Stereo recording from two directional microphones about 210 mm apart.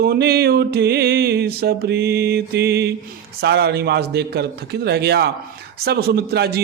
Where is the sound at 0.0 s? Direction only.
50° right (ahead or behind).